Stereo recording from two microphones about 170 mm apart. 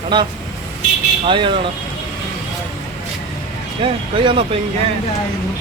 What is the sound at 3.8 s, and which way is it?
Speech, 30° right (ahead or behind).